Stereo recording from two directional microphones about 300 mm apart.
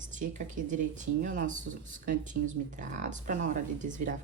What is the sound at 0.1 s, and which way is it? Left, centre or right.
Speech, right.